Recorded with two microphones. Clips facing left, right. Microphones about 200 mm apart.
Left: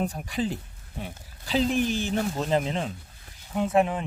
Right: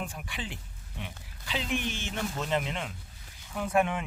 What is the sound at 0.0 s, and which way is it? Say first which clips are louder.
Speech: left 10 dB; 40° left (ahead or behind).